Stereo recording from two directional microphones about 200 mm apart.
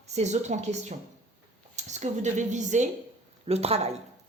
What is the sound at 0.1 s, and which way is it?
A woman's voice, 35° right (ahead or behind).